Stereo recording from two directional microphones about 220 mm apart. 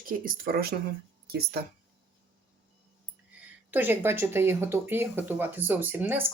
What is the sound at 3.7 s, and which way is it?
Speech, 10° right (ahead or behind).